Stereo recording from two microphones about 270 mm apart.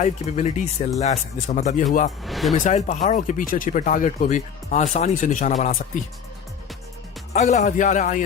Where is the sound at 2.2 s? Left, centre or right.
Centre.